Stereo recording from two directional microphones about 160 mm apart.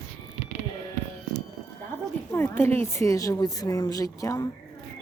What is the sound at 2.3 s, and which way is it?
Speech, 15° left (ahead or behind).